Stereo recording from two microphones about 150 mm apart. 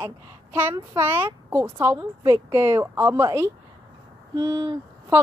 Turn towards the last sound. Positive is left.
turn(degrees=-20)  # may be behind; listen again after turning